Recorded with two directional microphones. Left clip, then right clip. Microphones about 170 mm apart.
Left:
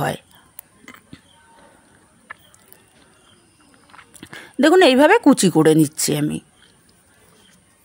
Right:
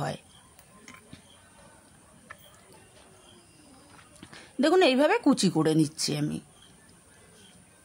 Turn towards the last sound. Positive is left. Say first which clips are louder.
# left 9 dB
turn(degrees=40)  # may be behind; listen again after turning